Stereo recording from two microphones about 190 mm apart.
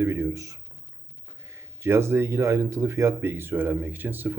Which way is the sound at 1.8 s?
15° right (ahead or behind).